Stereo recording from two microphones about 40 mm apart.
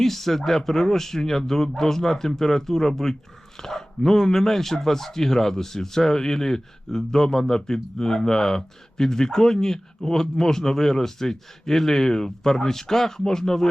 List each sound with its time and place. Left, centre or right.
0.0 s speech: centre